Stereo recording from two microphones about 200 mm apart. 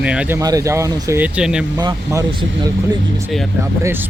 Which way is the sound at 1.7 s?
15° right (ahead or behind).